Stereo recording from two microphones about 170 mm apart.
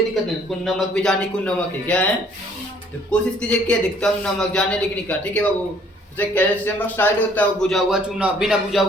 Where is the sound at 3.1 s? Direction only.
5° left (ahead or behind).